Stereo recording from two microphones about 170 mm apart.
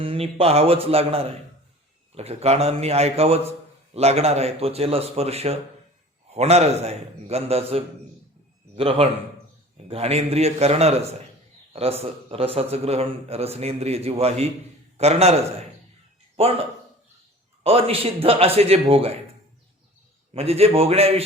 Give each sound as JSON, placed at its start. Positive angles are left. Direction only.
{"t": 0.0, "sound": "a man's voice", "side_deg": -35}
{"t": 16.4, "sound": "a man's voice", "side_deg": -35}
{"t": 17.6, "sound": "a man's voice", "side_deg": -35}
{"t": 20.3, "sound": "a man's voice", "side_deg": -35}